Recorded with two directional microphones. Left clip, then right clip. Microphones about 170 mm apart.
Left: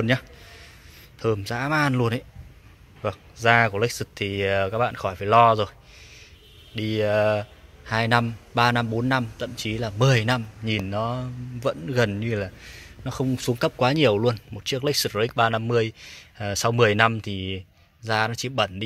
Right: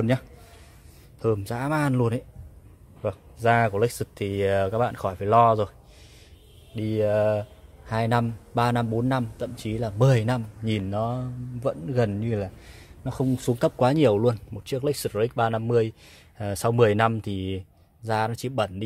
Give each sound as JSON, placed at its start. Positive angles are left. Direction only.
{"t": 1.2, "sound": "speech", "side_deg": -10}